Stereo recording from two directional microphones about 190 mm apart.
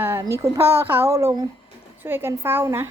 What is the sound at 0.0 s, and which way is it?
Speech, 15° right (ahead or behind).